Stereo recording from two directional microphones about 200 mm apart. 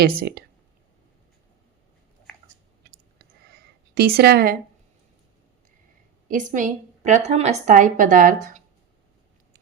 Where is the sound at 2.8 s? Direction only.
50° right (ahead or behind).